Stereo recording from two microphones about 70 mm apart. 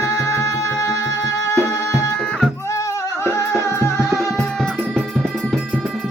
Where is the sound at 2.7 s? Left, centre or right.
Left.